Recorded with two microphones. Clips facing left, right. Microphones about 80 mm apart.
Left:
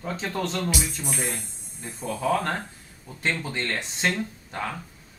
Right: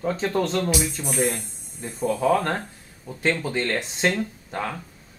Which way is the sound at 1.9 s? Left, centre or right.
Centre.